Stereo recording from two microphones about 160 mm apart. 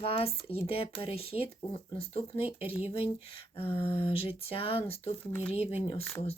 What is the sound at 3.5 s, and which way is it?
Speech, 35° left (ahead or behind).